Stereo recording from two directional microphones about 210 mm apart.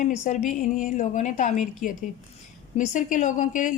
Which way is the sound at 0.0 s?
35° left (ahead or behind).